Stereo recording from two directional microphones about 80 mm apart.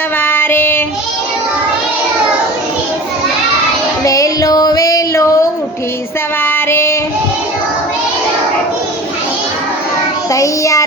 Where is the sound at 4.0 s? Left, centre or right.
Left.